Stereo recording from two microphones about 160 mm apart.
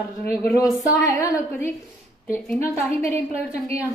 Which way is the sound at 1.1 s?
20° left (ahead or behind).